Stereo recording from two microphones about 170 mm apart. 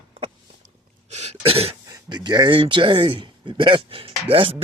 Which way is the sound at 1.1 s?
40° right (ahead or behind).